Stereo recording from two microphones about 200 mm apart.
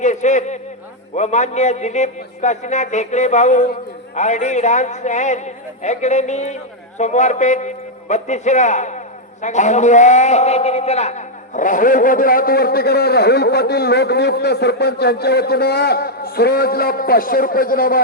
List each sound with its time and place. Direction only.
0.0 s a man's voice: 35° left (ahead or behind)